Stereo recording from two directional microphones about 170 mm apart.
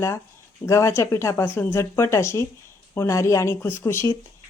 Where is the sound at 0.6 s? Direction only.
15° left (ahead or behind).